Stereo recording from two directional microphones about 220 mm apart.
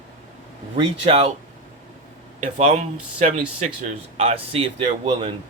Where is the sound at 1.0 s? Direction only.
25° right (ahead or behind).